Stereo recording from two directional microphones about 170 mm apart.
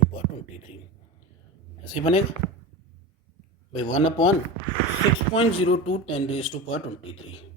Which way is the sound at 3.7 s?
40° left (ahead or behind).